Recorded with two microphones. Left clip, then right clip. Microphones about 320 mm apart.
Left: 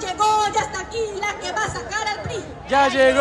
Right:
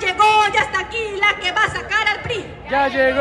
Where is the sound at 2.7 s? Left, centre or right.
Centre.